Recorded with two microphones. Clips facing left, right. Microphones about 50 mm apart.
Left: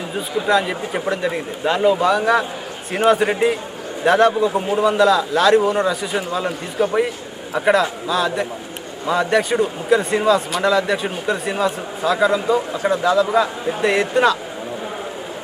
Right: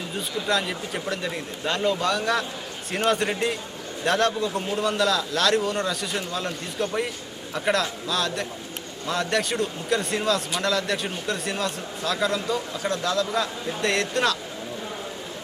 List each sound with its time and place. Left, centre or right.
0.4 s speech: centre
1.1 s speech: centre